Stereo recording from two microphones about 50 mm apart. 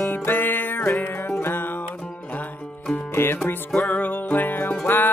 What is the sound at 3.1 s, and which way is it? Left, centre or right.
Music, left.